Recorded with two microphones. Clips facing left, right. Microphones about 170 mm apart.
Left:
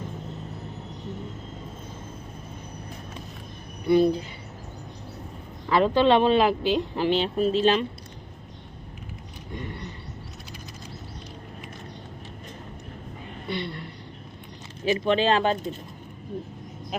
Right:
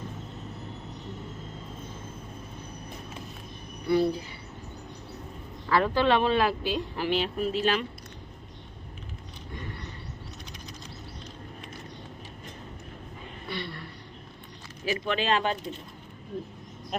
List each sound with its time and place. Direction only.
3.8 s speech: 20° left (ahead or behind)
5.6 s speech: 20° left (ahead or behind)
13.5 s a sound: 20° left (ahead or behind)
14.8 s speech: 25° left (ahead or behind)
16.9 s speech: centre (ahead or behind)